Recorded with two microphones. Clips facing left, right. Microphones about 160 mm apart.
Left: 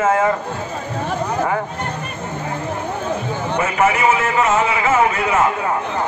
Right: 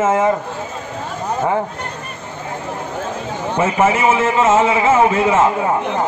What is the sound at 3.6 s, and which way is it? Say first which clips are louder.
A man's voice: right 2 dB; 25° right (ahead or behind).